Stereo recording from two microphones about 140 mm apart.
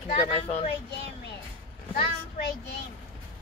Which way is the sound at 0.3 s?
50° left (ahead or behind).